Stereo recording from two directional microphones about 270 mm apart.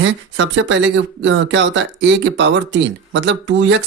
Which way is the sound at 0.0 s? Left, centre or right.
Right.